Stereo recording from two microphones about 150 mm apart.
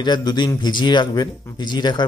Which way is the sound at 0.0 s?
30° left (ahead or behind).